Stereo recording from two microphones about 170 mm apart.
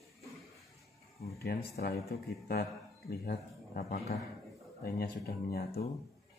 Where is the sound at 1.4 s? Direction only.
65° left (ahead or behind).